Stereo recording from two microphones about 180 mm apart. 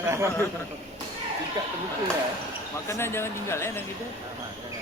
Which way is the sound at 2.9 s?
15° left (ahead or behind).